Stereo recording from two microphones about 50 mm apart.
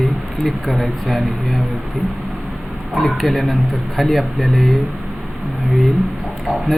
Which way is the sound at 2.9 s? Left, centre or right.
Centre.